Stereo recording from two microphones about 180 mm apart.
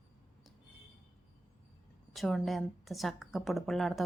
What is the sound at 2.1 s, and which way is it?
Speech, centre (ahead or behind).